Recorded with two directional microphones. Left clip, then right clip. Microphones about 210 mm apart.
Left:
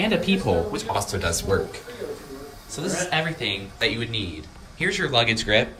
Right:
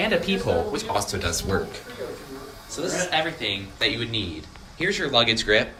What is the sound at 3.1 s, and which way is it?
A man's voice, 10° left (ahead or behind).